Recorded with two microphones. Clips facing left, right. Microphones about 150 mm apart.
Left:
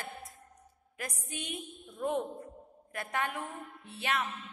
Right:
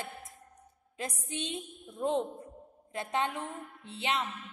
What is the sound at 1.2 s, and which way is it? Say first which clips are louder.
A woman's voice: right 3 dB; 25° right (ahead or behind).